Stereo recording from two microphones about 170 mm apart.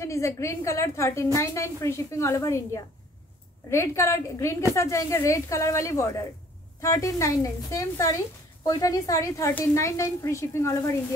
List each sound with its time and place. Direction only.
0.0 s a woman's voice: 15° left (ahead or behind)